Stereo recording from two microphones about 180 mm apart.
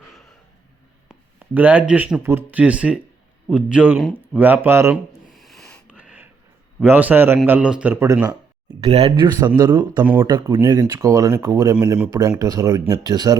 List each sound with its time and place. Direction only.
1.0 s speech: 10° right (ahead or behind)
5.3 s a sound: centre (ahead or behind)
6.0 s a sound: 5° right (ahead or behind)
6.8 s speech: 10° right (ahead or behind)
8.8 s speech: 35° right (ahead or behind)
10.0 s speech: 10° right (ahead or behind)